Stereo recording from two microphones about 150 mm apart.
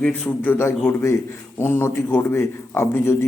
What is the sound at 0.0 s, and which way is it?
A man's voice, 15° left (ahead or behind).